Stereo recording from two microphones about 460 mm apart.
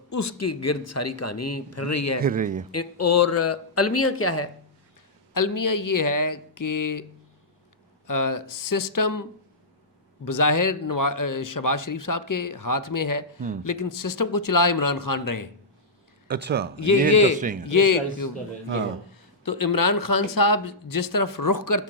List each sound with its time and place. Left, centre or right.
0.1 s a man's voice: left
2.2 s speech: centre
2.7 s a man's voice: left
5.3 s a man's voice: left
8.0 s speech: left
10.2 s a man's voice: left
16.3 s speech: right
16.7 s a man's voice: left
19.5 s speech: left